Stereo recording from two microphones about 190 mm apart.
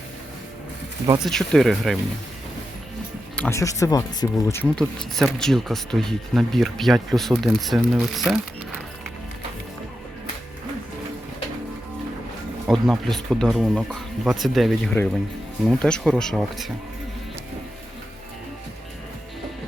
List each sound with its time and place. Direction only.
1.2 s speech: centre (ahead or behind)
3.3 s speech: 10° left (ahead or behind)
12.6 s speech: centre (ahead or behind)